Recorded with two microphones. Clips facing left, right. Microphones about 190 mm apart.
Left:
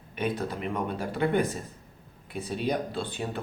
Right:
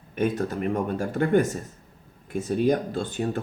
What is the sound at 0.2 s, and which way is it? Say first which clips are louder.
Speech: right 5 dB; 45° right (ahead or behind).